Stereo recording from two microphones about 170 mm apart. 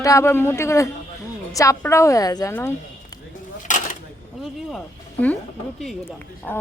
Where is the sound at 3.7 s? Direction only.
50° left (ahead or behind).